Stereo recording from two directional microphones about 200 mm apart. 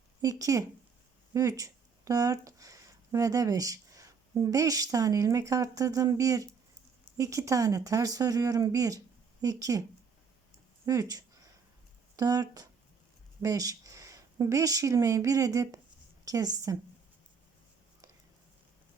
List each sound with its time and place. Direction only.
0.2 s speech: 15° right (ahead or behind)
10.8 s a woman's voice: 20° right (ahead or behind)